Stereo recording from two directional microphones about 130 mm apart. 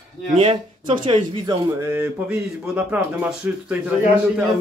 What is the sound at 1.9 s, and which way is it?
A man's voice, 15° right (ahead or behind).